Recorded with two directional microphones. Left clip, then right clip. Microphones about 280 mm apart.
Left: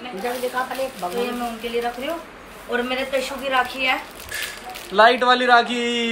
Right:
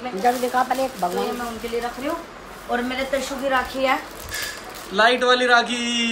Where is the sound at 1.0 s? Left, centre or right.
Right.